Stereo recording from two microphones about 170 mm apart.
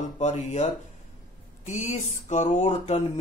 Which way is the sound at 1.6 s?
45° left (ahead or behind).